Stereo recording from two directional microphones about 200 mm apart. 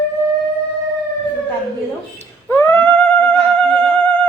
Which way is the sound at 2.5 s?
10° left (ahead or behind).